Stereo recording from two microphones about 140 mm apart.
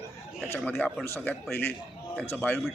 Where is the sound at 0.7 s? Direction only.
10° left (ahead or behind).